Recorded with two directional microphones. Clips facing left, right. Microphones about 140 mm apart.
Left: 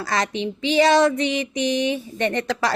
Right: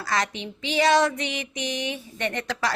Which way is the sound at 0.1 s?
30° left (ahead or behind).